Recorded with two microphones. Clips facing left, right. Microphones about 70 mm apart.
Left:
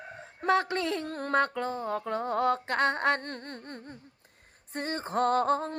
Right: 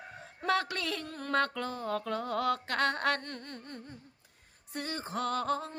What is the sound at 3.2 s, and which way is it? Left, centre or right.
A woman's voice, left.